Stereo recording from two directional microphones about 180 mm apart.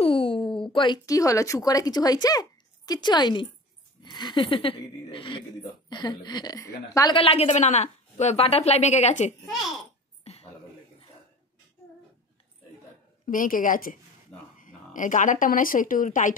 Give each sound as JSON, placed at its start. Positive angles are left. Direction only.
{"t": 0.0, "sound": "a sound", "side_deg": 30}
{"t": 0.7, "sound": "speech", "side_deg": 25}
{"t": 7.2, "sound": "a woman's voice", "side_deg": 35}
{"t": 9.5, "sound": "a child's voice", "side_deg": 0}
{"t": 10.2, "sound": "a sound", "side_deg": 35}
{"t": 13.3, "sound": "a woman's voice", "side_deg": 50}